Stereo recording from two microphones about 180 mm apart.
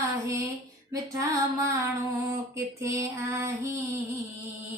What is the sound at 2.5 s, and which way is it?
Female singing, 15° right (ahead or behind).